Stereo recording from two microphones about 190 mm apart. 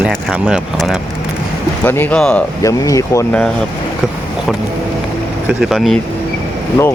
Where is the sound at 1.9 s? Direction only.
10° left (ahead or behind).